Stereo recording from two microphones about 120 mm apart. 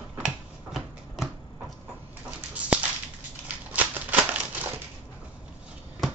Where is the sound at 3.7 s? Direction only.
10° right (ahead or behind).